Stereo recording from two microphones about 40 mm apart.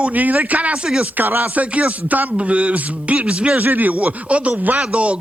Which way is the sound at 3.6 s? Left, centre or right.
Right.